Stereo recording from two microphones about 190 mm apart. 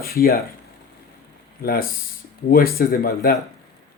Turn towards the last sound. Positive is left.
turn(degrees=50)  # may be behind; listen again after turning